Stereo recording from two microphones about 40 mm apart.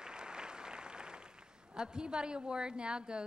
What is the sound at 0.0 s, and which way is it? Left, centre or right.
A man's voice, centre.